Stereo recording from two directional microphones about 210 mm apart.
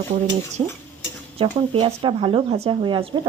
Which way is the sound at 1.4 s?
25° right (ahead or behind).